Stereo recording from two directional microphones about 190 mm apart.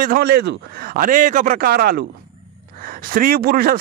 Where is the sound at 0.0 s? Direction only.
50° right (ahead or behind).